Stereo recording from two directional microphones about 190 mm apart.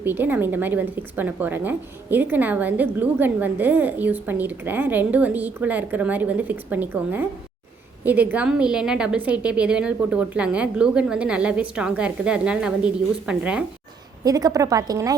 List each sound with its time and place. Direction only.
0.0 s a woman's voice: 10° right (ahead or behind)
14.3 s a woman's voice: 20° right (ahead or behind)